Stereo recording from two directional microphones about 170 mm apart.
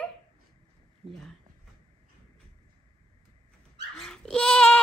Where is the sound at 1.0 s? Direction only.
35° right (ahead or behind).